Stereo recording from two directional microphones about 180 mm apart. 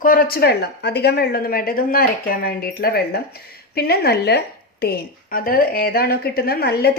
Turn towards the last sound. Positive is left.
turn(degrees=60)  # may be behind; listen again after turning